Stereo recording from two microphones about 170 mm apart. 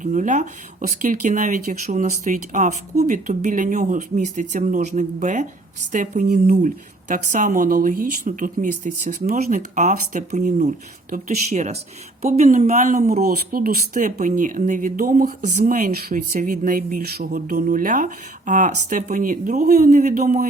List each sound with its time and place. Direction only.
0.0 s speech: 45° right (ahead or behind)
13.1 s speech: 65° right (ahead or behind)